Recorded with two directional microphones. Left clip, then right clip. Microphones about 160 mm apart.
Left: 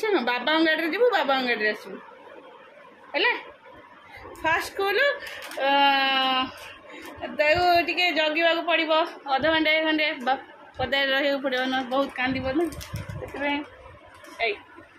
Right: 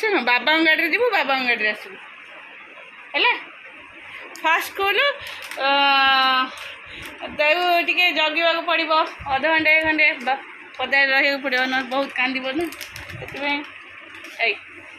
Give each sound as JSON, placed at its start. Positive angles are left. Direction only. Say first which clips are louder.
{"t": 0.0, "sound": "a woman's voice", "louder": "right 5 dB", "side_deg": 0}
{"t": 3.1, "sound": "speech", "louder": "right 4 dB", "side_deg": 5}
{"t": 4.4, "sound": "a woman's voice", "louder": "right 4 dB", "side_deg": 0}
{"t": 11.1, "sound": "a woman's voice", "louder": "right 5 dB", "side_deg": 0}
{"t": 14.4, "sound": "a woman's voice", "louder": "right 5 dB", "side_deg": 5}